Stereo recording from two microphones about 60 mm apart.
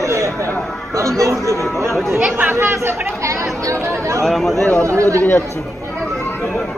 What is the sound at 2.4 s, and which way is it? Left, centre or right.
Speech, right.